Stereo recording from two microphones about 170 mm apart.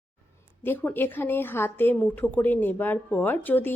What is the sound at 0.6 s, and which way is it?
Speech, 10° left (ahead or behind).